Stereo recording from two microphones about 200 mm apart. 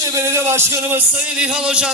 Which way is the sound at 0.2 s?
15° right (ahead or behind).